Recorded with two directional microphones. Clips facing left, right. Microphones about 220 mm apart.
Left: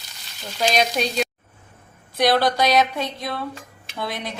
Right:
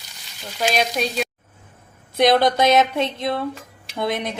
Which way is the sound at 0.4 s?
5° right (ahead or behind).